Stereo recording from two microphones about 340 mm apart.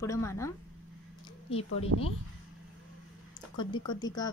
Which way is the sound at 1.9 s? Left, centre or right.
Right.